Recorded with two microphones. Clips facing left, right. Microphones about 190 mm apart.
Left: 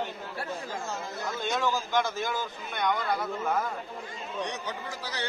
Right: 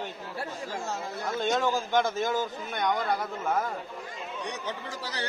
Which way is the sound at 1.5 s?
30° right (ahead or behind).